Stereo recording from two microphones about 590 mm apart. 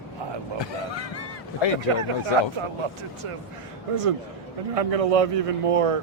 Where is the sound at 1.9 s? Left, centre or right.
Right.